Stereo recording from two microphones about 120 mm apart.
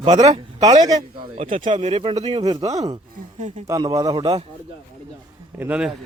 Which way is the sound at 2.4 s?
30° right (ahead or behind).